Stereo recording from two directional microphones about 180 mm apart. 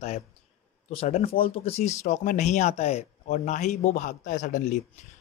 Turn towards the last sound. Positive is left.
turn(degrees=45)  # may be behind; listen again after turning